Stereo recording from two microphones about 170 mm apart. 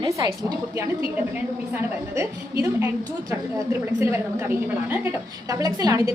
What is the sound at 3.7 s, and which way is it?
A woman's voice, 15° right (ahead or behind).